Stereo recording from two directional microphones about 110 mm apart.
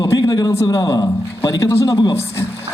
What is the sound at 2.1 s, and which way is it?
Speech, 25° left (ahead or behind).